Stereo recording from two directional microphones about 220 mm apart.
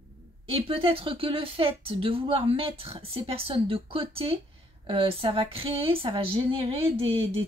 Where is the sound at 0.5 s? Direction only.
25° right (ahead or behind).